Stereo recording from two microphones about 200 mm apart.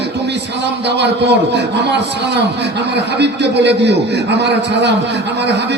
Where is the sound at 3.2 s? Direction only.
60° right (ahead or behind).